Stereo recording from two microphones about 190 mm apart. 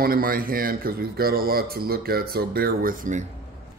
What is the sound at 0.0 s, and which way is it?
Speech, 50° right (ahead or behind).